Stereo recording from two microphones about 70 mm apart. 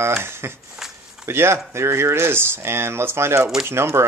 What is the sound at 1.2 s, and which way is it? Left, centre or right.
Speech, right.